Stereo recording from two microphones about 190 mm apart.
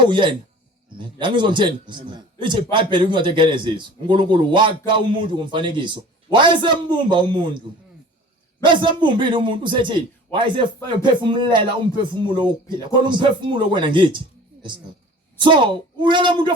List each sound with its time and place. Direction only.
0.0 s a man's voice: 25° right (ahead or behind)
8.6 s a man's voice: 25° right (ahead or behind)
15.4 s a man's voice: 25° right (ahead or behind)